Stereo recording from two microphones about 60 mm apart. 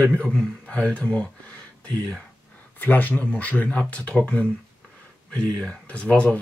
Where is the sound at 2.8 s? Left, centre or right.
Left.